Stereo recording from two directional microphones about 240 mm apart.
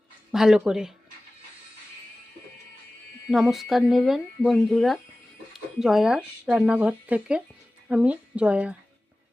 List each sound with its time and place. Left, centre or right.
0.3 s speech: centre
3.2 s speech: centre